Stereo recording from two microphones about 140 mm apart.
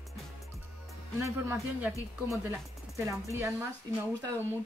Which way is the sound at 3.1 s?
20° right (ahead or behind).